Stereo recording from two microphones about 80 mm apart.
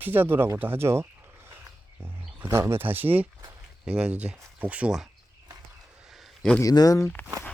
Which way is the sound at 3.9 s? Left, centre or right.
Centre.